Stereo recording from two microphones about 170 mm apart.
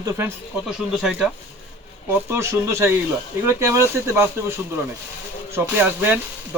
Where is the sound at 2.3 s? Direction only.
15° right (ahead or behind).